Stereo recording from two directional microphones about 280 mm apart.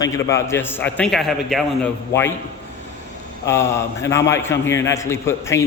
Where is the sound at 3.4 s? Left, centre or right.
Centre.